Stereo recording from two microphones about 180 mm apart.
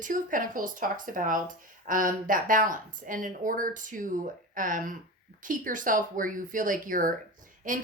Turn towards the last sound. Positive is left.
turn(degrees=-45)  # may be behind; listen again after turning